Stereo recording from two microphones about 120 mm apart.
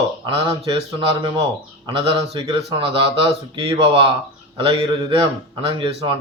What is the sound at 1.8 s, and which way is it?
Speech, 35° right (ahead or behind).